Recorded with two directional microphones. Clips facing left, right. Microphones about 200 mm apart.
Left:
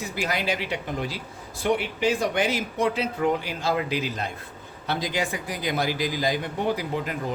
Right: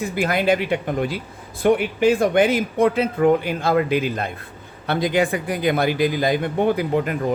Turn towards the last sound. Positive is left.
turn(degrees=-55)  # may be behind; listen again after turning